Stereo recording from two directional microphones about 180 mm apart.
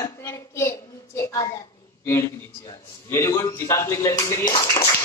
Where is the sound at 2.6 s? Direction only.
15° left (ahead or behind).